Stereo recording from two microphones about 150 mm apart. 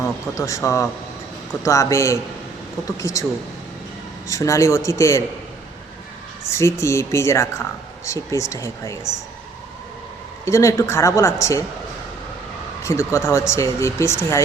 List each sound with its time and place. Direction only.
0.0 s speech: 20° left (ahead or behind)
4.3 s speech: 20° left (ahead or behind)
6.5 s speech: 20° left (ahead or behind)
10.4 s speech: 20° left (ahead or behind)
12.8 s speech: 20° left (ahead or behind)